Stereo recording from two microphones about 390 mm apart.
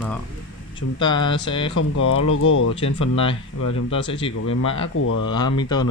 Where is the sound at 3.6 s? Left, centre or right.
Left.